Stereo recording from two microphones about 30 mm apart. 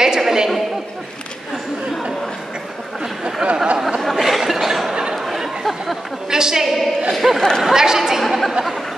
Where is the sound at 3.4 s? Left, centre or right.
Right.